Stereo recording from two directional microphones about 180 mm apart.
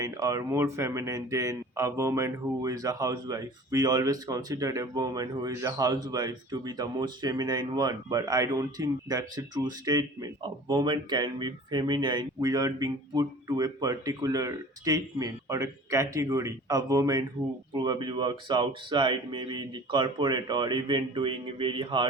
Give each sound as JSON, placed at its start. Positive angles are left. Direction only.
{"t": 0.0, "sound": "speech", "side_deg": -20}